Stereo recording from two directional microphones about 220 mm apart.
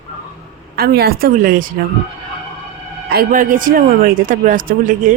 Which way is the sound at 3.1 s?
40° right (ahead or behind).